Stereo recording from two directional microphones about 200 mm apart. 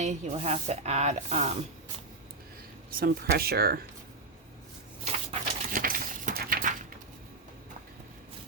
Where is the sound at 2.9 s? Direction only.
45° right (ahead or behind).